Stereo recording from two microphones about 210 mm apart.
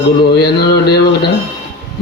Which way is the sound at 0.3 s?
50° left (ahead or behind).